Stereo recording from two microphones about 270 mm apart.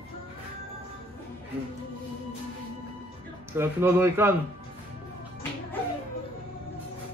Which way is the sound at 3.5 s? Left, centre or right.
Centre.